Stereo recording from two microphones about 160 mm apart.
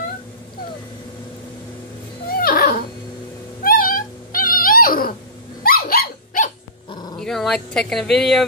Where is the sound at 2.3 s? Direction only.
65° left (ahead or behind).